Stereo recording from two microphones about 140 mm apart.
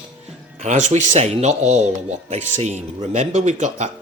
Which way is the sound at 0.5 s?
60° right (ahead or behind).